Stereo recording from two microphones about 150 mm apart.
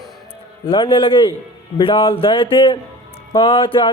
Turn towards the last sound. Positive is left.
turn(degrees=35)  # may be behind; listen again after turning